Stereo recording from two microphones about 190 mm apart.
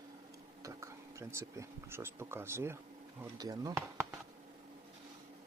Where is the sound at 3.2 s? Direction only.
20° right (ahead or behind).